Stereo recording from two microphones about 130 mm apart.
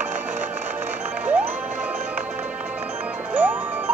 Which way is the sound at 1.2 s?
10° right (ahead or behind).